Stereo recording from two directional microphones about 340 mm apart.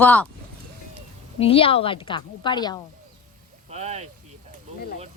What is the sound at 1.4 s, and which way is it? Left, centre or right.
Speech, centre.